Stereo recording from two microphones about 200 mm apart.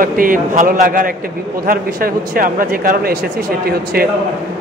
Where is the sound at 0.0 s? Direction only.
45° right (ahead or behind).